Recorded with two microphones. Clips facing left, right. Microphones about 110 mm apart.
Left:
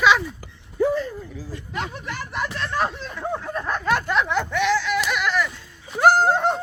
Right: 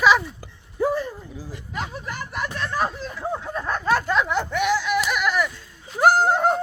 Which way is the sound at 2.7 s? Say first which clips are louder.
Left 1 dB; 10° right (ahead or behind).